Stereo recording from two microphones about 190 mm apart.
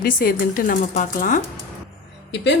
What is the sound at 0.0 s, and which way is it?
Speech, 50° left (ahead or behind).